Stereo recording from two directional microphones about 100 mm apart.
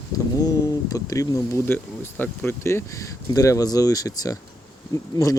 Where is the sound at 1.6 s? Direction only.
20° left (ahead or behind).